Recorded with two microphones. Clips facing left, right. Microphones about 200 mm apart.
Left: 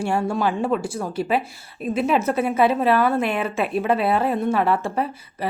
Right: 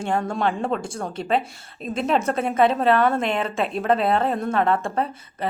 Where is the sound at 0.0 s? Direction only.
10° left (ahead or behind).